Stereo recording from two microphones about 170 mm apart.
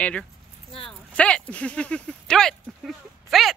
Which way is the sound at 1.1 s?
5° left (ahead or behind).